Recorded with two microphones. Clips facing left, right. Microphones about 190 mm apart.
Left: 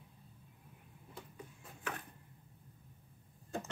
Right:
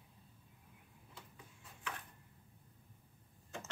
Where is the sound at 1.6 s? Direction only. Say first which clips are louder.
Left 4 dB; 50° left (ahead or behind).